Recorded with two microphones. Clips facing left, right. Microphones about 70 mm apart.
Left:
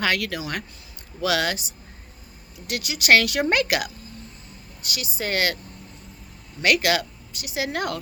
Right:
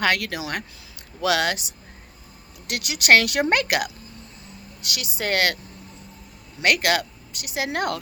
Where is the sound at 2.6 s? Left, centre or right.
Right.